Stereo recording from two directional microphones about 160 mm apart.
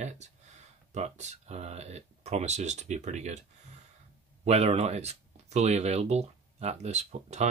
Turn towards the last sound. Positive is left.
turn(degrees=-45)  # may be behind; listen again after turning